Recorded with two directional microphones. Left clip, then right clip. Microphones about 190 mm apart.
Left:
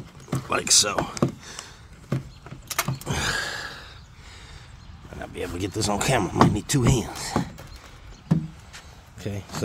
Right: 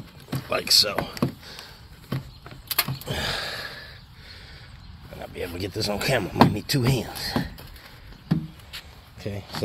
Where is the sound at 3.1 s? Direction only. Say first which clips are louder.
Left 2 dB; 40° left (ahead or behind).